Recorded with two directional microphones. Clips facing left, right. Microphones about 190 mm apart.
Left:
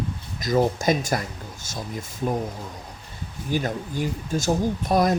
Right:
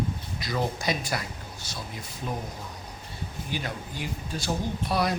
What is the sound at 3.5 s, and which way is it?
Speech, 45° left (ahead or behind).